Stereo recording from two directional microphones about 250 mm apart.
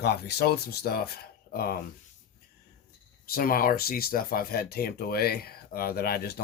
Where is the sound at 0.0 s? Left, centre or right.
Left.